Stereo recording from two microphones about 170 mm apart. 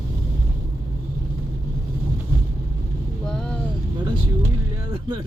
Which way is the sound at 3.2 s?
5° left (ahead or behind).